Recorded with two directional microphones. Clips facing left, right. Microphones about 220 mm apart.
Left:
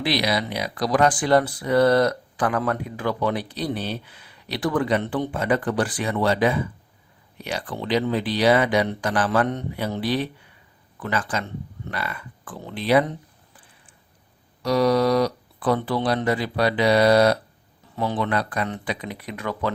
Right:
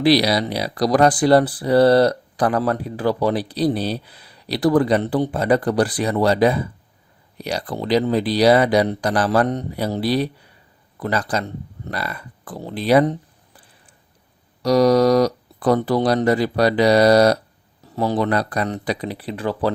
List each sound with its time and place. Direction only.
0.0 s speech: 35° right (ahead or behind)
14.6 s speech: 40° right (ahead or behind)